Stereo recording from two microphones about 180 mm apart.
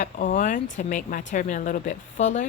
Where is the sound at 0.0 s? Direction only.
45° left (ahead or behind).